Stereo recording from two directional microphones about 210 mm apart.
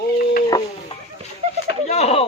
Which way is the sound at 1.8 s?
30° left (ahead or behind).